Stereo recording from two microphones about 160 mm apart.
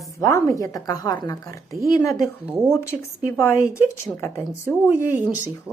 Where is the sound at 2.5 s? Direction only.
5° right (ahead or behind).